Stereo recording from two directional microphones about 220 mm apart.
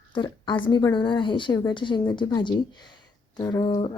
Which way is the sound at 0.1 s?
20° left (ahead or behind).